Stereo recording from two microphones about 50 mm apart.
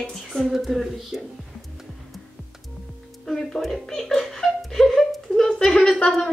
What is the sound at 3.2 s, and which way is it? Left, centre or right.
Speech, centre.